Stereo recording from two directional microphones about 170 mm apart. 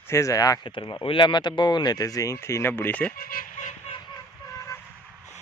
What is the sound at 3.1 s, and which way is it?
Speech, 60° left (ahead or behind).